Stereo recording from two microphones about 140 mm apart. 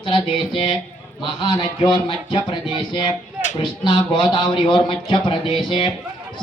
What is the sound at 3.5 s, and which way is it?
Speech, 35° left (ahead or behind).